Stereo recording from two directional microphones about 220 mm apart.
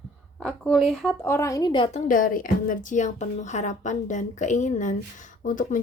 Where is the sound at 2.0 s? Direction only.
40° left (ahead or behind).